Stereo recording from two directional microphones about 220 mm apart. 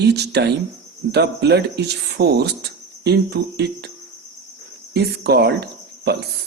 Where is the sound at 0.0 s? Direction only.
50° right (ahead or behind).